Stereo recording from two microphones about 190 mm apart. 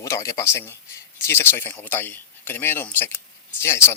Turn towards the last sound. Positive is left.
turn(degrees=15)  # may be behind; listen again after turning